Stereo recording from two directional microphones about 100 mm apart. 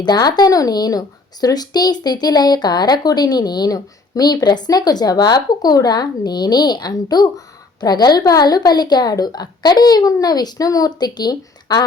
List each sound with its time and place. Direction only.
0.0 s speech: 45° left (ahead or behind)